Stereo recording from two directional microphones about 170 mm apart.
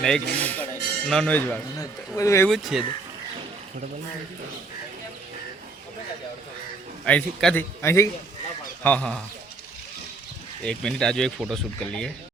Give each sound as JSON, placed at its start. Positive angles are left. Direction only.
{"t": 0.0, "sound": "speech", "side_deg": 5}
{"t": 1.7, "sound": "speech", "side_deg": 20}
{"t": 2.5, "sound": "speech", "side_deg": 0}
{"t": 7.0, "sound": "a man's voice", "side_deg": 5}
{"t": 10.6, "sound": "speech", "side_deg": 5}